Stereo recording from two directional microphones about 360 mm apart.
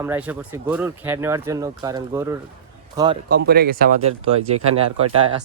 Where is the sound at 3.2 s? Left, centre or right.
Right.